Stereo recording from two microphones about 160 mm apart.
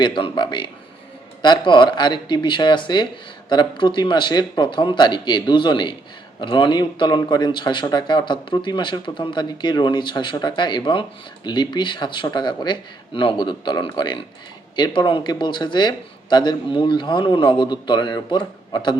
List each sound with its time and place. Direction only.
0.0 s speech: 30° left (ahead or behind)